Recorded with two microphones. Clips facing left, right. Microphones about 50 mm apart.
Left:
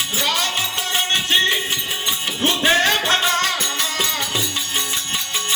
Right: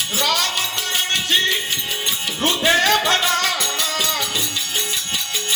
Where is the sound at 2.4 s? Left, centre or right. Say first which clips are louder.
Even; left.